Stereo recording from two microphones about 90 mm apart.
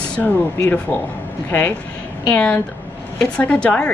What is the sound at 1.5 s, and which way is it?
Speech, 20° left (ahead or behind).